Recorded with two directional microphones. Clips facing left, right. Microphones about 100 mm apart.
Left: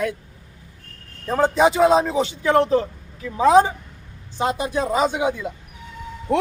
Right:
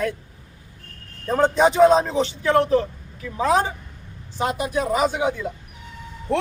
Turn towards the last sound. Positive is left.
turn(degrees=15)  # may be behind; listen again after turning